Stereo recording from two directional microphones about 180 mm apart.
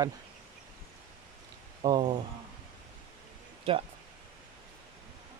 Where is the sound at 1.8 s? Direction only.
20° right (ahead or behind).